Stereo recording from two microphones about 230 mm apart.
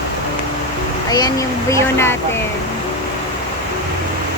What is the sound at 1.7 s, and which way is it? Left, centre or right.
Speech, centre.